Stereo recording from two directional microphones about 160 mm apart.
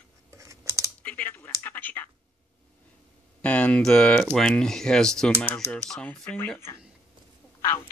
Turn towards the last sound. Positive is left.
turn(degrees=15)  # may be behind; listen again after turning